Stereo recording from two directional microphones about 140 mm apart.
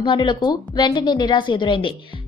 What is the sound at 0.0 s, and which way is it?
A woman's voice, 35° left (ahead or behind).